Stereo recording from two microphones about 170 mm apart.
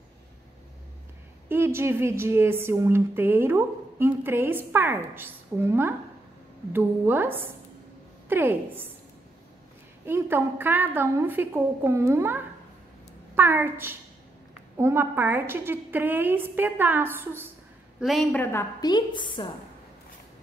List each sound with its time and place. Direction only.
1.5 s a woman's voice: 15° right (ahead or behind)
10.0 s speech: 15° right (ahead or behind)
18.0 s a woman's voice: centre (ahead or behind)
18.4 s a woman's voice: 15° left (ahead or behind)